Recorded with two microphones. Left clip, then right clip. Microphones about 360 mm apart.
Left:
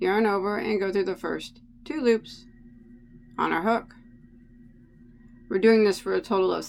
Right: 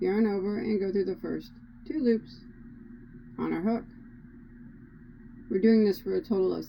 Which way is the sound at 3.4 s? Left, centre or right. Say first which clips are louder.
Left 7 dB; left.